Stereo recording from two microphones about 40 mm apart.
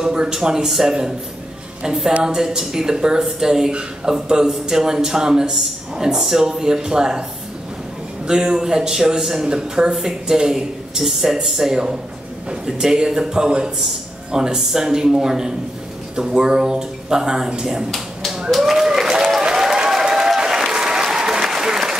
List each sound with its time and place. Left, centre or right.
0.0 s a man's voice: centre
8.3 s a man's voice: centre
17.9 s dog: centre
18.5 s a sound: centre
19.4 s applause: centre